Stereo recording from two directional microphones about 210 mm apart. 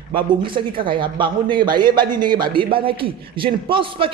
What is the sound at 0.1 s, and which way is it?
A man's voice, 25° right (ahead or behind).